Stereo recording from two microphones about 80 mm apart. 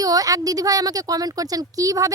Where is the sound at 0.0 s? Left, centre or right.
Right.